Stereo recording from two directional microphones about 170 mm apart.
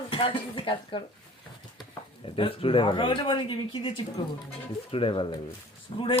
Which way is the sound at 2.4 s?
30° left (ahead or behind).